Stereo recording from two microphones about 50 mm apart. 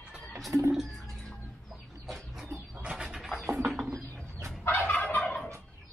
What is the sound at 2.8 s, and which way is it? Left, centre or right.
Bird, centre.